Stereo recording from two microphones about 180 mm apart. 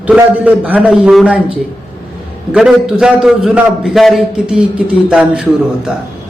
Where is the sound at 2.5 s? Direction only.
5° right (ahead or behind).